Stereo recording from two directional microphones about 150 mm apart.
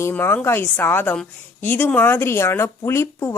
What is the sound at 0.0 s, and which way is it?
A woman's voice, 15° left (ahead or behind).